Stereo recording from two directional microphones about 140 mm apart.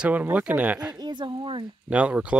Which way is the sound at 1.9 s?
10° right (ahead or behind).